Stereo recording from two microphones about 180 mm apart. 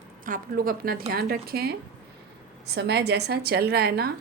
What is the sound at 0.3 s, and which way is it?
A woman's voice, 55° right (ahead or behind).